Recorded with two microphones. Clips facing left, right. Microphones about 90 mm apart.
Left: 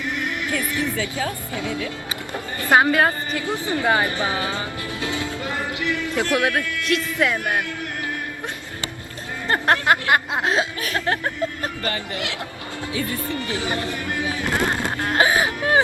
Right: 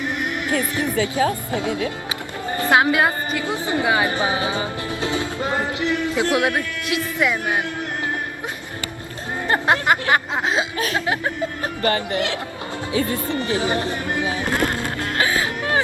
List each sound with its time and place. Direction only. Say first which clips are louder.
0.0 s a woman's voice: right 2 dB; 20° right (ahead or behind)
9.5 s speech: even; 10° right (ahead or behind)
10.1 s chuckle: even; centre (ahead or behind)
10.9 s speech: left 1 dB; 15° right (ahead or behind)
11.8 s speech: right 9 dB; 50° right (ahead or behind)
13.1 s a woman's voice: right 4 dB; 20° right (ahead or behind)
14.5 s speech: even; 20° left (ahead or behind)